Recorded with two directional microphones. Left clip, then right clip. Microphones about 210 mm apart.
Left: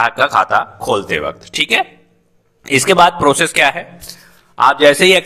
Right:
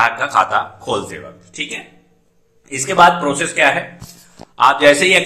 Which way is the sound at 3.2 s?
50° left (ahead or behind).